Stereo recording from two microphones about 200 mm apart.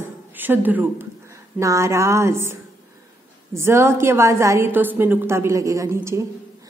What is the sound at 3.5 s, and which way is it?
A woman's voice, 10° right (ahead or behind).